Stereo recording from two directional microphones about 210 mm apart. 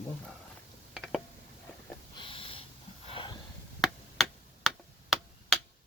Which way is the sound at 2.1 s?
25° left (ahead or behind).